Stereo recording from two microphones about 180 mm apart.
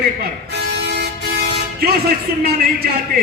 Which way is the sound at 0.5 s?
65° right (ahead or behind).